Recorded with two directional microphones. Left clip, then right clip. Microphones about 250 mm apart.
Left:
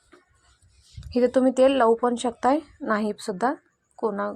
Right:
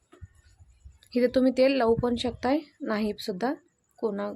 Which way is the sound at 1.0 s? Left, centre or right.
Centre.